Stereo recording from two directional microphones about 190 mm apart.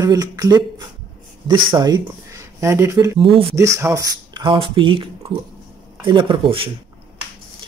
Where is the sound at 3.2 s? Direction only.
30° right (ahead or behind).